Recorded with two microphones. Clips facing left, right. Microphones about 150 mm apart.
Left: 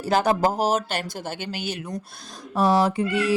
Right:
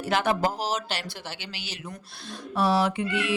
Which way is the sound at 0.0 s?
40° left (ahead or behind).